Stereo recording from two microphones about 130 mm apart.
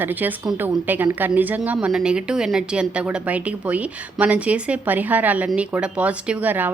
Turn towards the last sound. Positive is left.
turn(degrees=-15)  # may be behind; listen again after turning